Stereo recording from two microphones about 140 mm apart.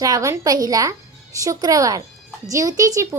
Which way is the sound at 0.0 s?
25° right (ahead or behind).